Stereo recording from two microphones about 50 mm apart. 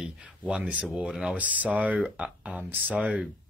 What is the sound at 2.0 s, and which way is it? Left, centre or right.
Speech, centre.